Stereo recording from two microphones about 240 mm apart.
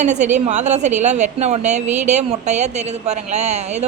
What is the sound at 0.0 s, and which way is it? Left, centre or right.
A woman's voice, right.